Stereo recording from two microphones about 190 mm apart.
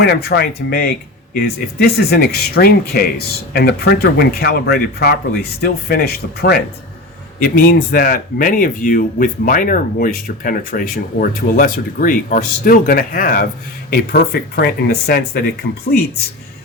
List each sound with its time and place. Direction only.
0.0 s speech: 55° left (ahead or behind)